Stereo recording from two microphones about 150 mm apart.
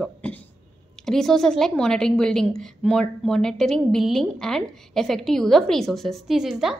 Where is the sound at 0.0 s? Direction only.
10° left (ahead or behind).